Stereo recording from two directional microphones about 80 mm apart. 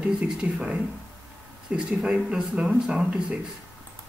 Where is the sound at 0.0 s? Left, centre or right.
Centre.